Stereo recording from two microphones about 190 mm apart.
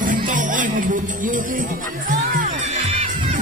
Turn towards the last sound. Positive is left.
turn(degrees=-40)  # may be behind; listen again after turning